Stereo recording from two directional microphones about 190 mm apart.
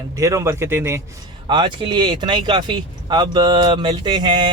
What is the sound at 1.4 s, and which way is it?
Speech, 25° right (ahead or behind).